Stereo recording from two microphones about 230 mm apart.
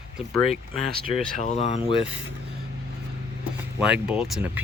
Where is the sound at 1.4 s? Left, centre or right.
Left.